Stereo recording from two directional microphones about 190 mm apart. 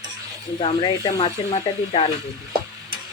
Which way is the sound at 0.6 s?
25° left (ahead or behind).